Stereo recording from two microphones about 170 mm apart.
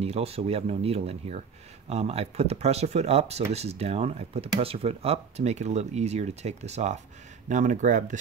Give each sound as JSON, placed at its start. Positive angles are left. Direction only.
{"t": 0.0, "sound": "speech", "side_deg": -35}